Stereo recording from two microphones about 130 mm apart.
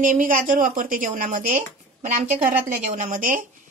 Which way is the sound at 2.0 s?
65° right (ahead or behind).